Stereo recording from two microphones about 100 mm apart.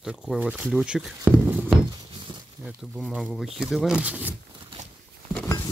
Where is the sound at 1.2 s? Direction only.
20° right (ahead or behind).